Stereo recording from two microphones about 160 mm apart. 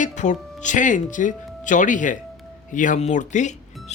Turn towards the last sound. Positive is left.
turn(degrees=50)  # may be behind; listen again after turning